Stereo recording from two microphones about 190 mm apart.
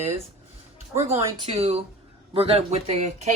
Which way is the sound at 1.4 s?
30° right (ahead or behind).